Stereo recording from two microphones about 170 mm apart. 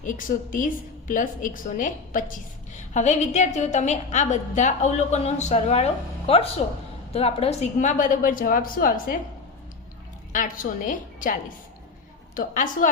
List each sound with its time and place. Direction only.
0.0 s a woman's voice: 50° left (ahead or behind)
10.3 s a woman's voice: 50° left (ahead or behind)